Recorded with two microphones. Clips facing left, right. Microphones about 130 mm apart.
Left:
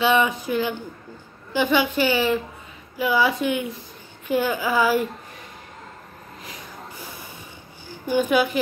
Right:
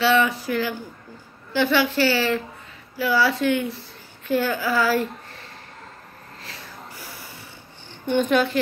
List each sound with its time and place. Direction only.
0.0 s speech: 20° left (ahead or behind)
6.4 s snort: 15° left (ahead or behind)
7.9 s a woman's voice: 5° left (ahead or behind)